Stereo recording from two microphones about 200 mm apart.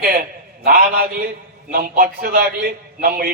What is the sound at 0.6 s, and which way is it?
A man's voice, 45° right (ahead or behind).